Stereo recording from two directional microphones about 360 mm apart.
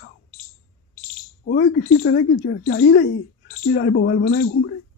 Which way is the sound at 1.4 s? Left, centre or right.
Left.